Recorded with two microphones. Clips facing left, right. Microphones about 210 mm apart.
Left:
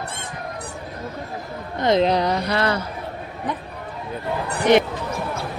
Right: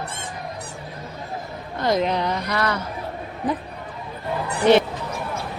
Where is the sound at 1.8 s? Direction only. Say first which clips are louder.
Left 3 dB; 20° left (ahead or behind).